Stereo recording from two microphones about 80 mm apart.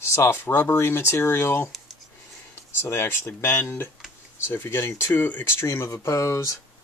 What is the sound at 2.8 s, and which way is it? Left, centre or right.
Speech, left.